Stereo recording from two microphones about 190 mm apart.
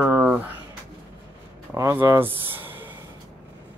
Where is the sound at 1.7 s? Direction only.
15° right (ahead or behind).